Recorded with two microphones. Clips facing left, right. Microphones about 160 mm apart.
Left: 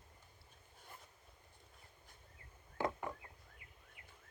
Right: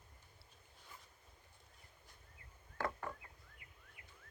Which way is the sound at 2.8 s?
15° left (ahead or behind).